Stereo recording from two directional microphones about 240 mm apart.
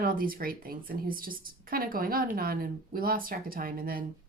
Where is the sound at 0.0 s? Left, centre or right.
Right.